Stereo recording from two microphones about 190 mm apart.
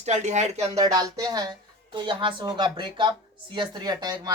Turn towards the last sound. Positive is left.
turn(degrees=-20)  # may be behind; listen again after turning